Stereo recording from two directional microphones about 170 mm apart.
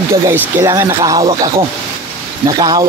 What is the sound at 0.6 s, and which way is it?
A man's voice, 20° right (ahead or behind).